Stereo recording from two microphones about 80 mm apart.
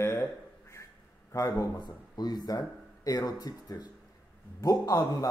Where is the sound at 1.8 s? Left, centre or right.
Left.